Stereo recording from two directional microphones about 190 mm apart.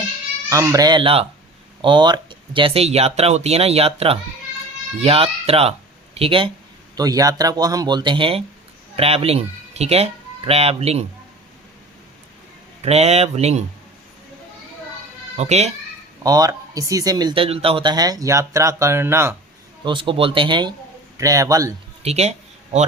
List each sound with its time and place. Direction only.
0.5 s speech: 15° right (ahead or behind); by 11.0 s 35° right (ahead or behind)
12.8 s speech: 35° right (ahead or behind)
15.4 s speech: 35° right (ahead or behind)
16.2 s speech: 20° right (ahead or behind)
19.8 s a man's voice: 25° right (ahead or behind)
22.0 s speech: 35° right (ahead or behind)